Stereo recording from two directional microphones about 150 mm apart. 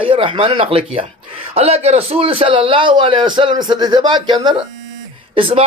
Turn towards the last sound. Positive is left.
turn(degrees=-40)  # may be behind; listen again after turning